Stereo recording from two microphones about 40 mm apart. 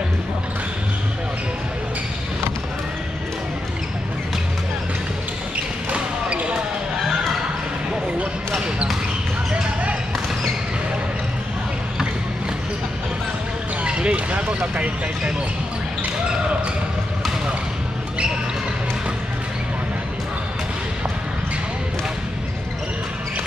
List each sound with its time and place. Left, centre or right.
5.9 s basketball bounce: right
13.8 s basketball bounce: right